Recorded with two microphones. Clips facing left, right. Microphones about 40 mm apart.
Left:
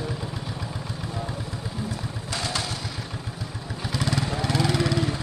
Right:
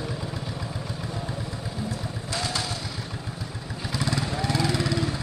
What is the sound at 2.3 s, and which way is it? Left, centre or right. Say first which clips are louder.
Vehicle: even; left.